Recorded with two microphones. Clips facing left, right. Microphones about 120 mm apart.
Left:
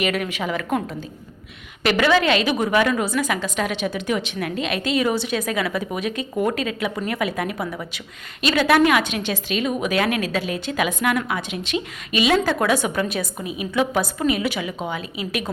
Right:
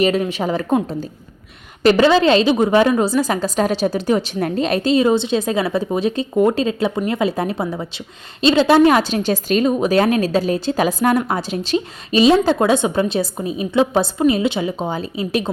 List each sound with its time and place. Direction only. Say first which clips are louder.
0.0 s a woman's voice: right 6 dB; 30° right (ahead or behind)